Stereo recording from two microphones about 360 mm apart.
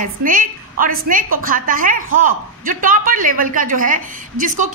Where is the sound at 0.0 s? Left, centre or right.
Right.